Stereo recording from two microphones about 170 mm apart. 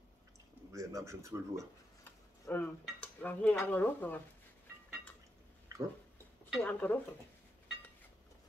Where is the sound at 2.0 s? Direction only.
10° left (ahead or behind).